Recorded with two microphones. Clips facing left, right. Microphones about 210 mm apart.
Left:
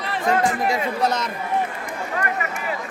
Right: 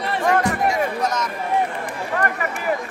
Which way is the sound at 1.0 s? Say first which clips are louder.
Left 1 dB; 30° left (ahead or behind).